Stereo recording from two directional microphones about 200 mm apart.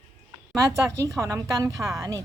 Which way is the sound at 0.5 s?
15° right (ahead or behind).